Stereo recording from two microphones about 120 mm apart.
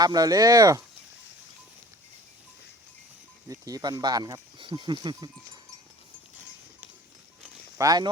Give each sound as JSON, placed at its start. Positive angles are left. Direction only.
{"t": 0.0, "sound": "speech", "side_deg": -30}
{"t": 3.5, "sound": "speech", "side_deg": -30}
{"t": 7.8, "sound": "speech", "side_deg": -30}